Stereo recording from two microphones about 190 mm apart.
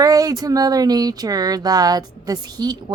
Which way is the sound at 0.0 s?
20° right (ahead or behind).